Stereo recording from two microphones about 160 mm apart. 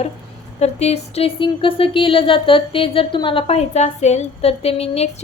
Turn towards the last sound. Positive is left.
turn(degrees=40)  # may be behind; listen again after turning